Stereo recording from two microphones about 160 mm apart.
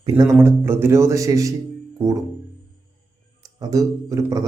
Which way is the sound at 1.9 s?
20° right (ahead or behind).